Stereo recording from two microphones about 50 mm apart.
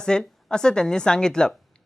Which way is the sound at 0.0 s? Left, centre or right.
Centre.